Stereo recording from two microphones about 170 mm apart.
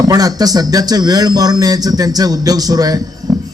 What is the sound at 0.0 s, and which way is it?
A man's voice, 20° right (ahead or behind).